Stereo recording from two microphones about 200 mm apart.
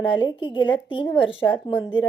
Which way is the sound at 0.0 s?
25° left (ahead or behind).